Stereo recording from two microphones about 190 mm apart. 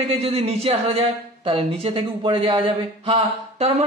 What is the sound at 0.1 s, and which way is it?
Speech, 30° right (ahead or behind).